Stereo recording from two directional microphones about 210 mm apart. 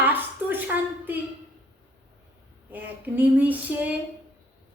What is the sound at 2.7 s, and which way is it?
A woman's voice, 10° right (ahead or behind).